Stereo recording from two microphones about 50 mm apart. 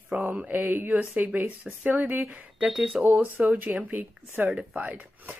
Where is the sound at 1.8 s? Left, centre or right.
Right.